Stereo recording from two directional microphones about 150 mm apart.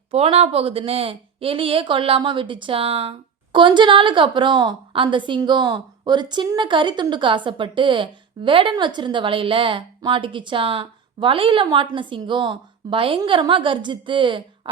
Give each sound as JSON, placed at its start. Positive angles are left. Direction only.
{"t": 0.1, "sound": "speech", "side_deg": -40}